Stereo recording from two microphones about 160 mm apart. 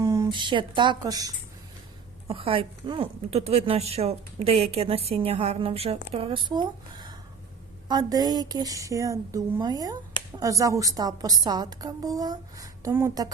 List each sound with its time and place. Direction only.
0.0 s speech: 20° right (ahead or behind)
2.3 s a woman's voice: 35° right (ahead or behind); by 13.2 s 15° right (ahead or behind)